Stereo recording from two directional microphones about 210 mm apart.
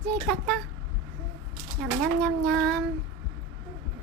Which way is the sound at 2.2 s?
5° left (ahead or behind).